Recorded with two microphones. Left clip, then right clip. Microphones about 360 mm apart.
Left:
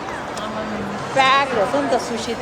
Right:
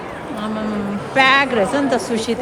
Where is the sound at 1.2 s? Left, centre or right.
Right.